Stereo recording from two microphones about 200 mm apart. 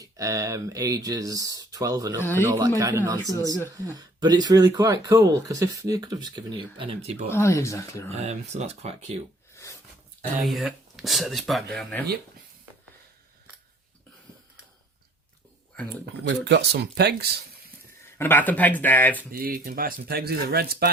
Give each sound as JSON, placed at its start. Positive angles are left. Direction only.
{"t": 0.0, "sound": "speech", "side_deg": -15}
{"t": 2.2, "sound": "speech", "side_deg": 10}
{"t": 2.6, "sound": "speech", "side_deg": -15}
{"t": 7.3, "sound": "speech", "side_deg": 15}
{"t": 8.1, "sound": "speech", "side_deg": -35}
{"t": 10.4, "sound": "speech", "side_deg": 0}
{"t": 15.7, "sound": "a sound", "side_deg": 5}
{"t": 16.2, "sound": "speech", "side_deg": -60}
{"t": 18.2, "sound": "speech", "side_deg": 10}
{"t": 19.3, "sound": "speech", "side_deg": -45}